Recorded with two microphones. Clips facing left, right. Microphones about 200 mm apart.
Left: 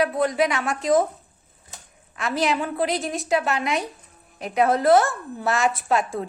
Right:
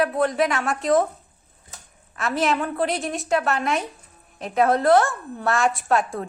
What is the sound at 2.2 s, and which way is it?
A woman's voice, centre (ahead or behind).